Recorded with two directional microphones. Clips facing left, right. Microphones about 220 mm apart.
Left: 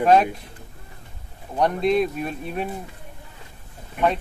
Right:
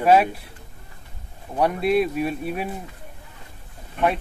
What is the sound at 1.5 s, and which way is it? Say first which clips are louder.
Speech: even; 5° right (ahead or behind).